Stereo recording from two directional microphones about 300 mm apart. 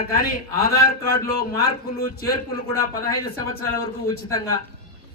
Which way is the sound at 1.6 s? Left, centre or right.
Left.